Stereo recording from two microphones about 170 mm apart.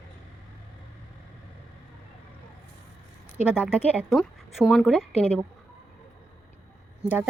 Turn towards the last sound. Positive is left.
turn(degrees=-10)  # may be behind; listen again after turning